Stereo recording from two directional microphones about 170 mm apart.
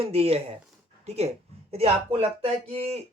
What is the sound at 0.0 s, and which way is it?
Speech, 35° right (ahead or behind).